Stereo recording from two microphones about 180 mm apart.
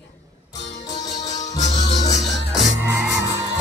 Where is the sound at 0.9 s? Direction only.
40° left (ahead or behind).